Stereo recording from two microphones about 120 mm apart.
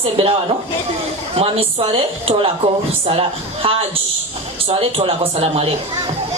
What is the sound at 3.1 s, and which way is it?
Speech, 50° right (ahead or behind).